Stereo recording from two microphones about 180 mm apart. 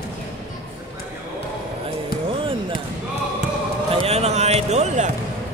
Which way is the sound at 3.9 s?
35° right (ahead or behind).